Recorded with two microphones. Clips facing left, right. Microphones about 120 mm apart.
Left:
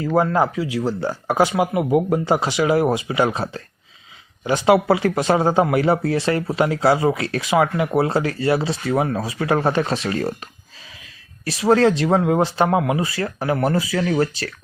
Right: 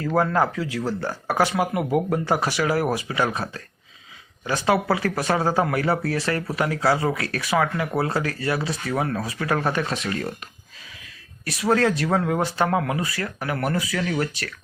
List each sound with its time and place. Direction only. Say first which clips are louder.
0.0 s speech: left 3 dB; 10° left (ahead or behind); by 10.3 s 35° left (ahead or behind)
11.4 s speech: left 5 dB; 30° left (ahead or behind)